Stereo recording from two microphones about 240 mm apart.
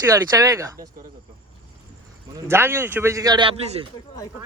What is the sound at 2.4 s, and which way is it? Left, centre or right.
A man's voice, centre.